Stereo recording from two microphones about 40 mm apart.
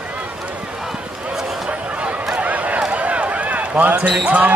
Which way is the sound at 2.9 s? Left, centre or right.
Right.